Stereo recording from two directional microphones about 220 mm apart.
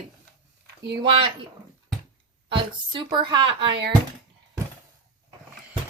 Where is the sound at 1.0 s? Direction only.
20° right (ahead or behind).